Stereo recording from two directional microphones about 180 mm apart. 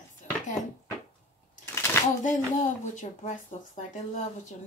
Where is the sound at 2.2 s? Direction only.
45° left (ahead or behind).